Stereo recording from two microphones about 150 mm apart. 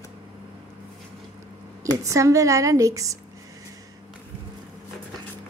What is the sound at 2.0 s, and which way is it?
A woman's voice, 20° right (ahead or behind).